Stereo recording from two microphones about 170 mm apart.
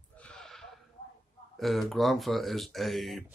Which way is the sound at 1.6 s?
Centre (ahead or behind).